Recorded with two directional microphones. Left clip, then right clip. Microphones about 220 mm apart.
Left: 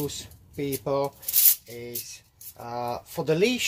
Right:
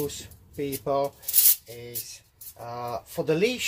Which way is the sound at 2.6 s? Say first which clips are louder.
Left 2 dB; 35° left (ahead or behind).